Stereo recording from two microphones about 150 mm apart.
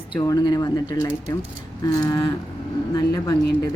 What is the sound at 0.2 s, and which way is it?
Speech, 25° left (ahead or behind).